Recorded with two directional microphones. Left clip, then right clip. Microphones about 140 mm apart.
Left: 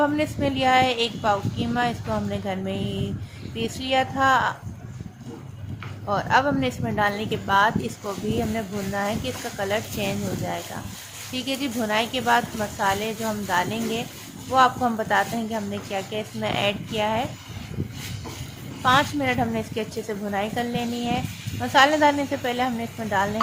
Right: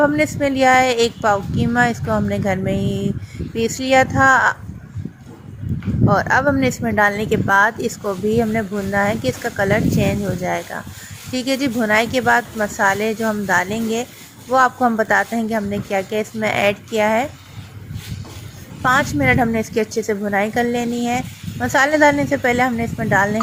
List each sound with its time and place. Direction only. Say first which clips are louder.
0.0 s speech: right 6 dB; 35° right (ahead or behind)
6.1 s speech: right 5 dB; 45° right (ahead or behind)
18.8 s speech: right 4 dB; 40° right (ahead or behind)